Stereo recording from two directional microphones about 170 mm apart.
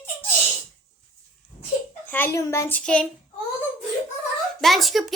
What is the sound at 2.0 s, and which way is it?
A child's voice, 10° left (ahead or behind).